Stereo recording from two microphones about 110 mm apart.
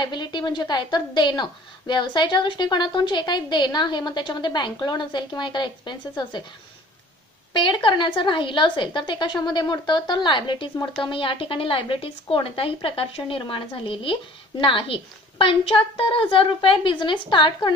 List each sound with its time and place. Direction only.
0.0 s a woman's voice: 45° left (ahead or behind)
7.5 s a woman's voice: 45° left (ahead or behind)